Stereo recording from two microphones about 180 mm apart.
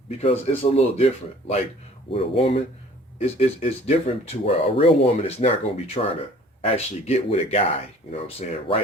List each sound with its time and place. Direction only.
0.2 s speech: 35° left (ahead or behind)